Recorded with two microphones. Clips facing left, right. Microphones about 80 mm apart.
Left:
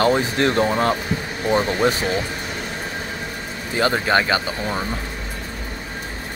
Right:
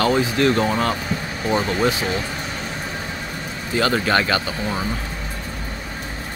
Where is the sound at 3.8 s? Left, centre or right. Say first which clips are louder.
Left 1 dB; left.